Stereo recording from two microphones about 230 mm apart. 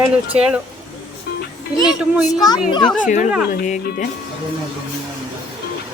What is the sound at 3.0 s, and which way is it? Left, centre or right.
Speech, left.